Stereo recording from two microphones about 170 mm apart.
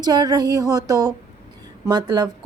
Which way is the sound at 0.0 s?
25° right (ahead or behind).